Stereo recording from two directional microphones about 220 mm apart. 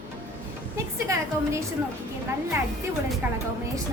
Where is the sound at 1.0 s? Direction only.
15° right (ahead or behind).